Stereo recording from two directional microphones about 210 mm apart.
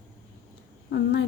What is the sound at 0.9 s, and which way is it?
Speech, 55° left (ahead or behind).